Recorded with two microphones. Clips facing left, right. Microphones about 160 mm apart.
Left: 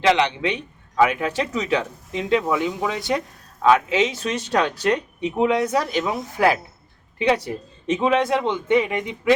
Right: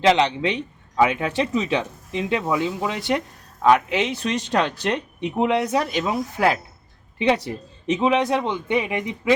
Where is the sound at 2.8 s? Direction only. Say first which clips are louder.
Even; 20° right (ahead or behind).